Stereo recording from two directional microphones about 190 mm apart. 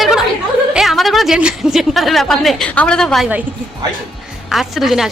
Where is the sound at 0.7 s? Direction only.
Centre (ahead or behind).